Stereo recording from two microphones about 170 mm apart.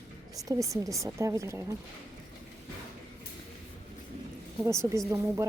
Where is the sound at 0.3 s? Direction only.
20° right (ahead or behind).